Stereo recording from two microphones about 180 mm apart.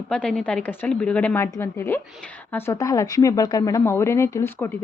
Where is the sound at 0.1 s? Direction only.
5° left (ahead or behind).